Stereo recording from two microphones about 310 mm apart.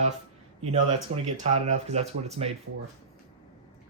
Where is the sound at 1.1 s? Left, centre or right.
Centre.